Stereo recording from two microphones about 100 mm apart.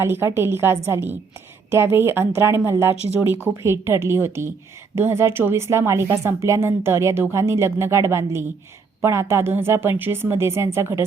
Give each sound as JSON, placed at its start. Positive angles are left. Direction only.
{"t": 0.0, "sound": "speech", "side_deg": -25}